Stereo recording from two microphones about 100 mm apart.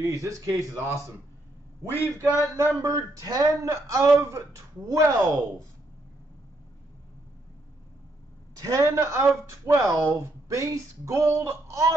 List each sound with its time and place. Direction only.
0.0 s speech: 30° right (ahead or behind)
1.9 s a man's voice: 25° left (ahead or behind)
2.8 s speech: 35° right (ahead or behind)
8.5 s speech: 35° right (ahead or behind)